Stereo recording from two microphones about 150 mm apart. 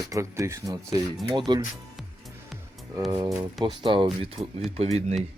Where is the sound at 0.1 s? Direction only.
20° right (ahead or behind).